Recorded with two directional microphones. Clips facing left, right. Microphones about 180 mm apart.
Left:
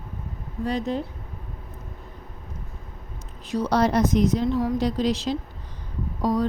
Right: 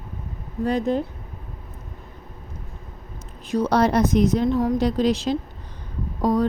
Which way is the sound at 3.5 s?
60° right (ahead or behind).